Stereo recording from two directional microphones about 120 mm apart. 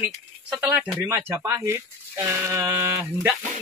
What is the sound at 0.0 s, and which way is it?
Speech, 15° right (ahead or behind).